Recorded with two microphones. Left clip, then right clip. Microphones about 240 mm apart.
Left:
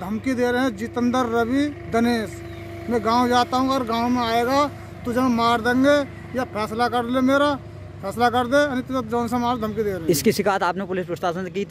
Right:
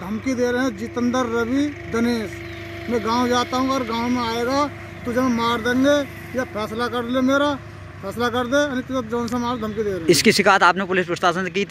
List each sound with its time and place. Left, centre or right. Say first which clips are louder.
0.0 s speech: even; left
10.0 s speech: right 6 dB; centre